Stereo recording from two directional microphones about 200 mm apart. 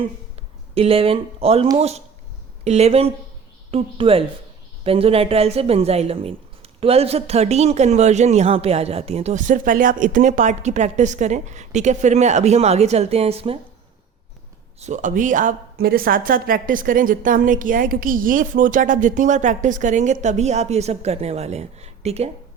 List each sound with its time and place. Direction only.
0.0 s speech: 30° right (ahead or behind)
2.6 s a woman's voice: 30° right (ahead or behind)
14.8 s speech: 35° right (ahead or behind)